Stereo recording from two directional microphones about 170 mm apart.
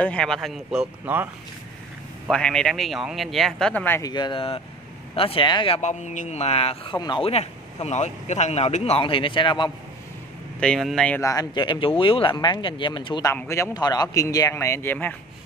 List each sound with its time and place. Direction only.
0.0 s speech: 5° left (ahead or behind); by 1.3 s 10° right (ahead or behind)
2.2 s speech: 5° left (ahead or behind)
4.0 s speech: 25° left (ahead or behind)
5.8 s speech: 45° left (ahead or behind); by 9.7 s 30° left (ahead or behind)
10.6 s speech: centre (ahead or behind)
11.1 s speech: 20° left (ahead or behind)
13.3 s speech: 15° left (ahead or behind)